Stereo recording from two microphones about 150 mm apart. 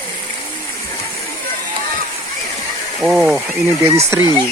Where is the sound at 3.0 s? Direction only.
5° right (ahead or behind).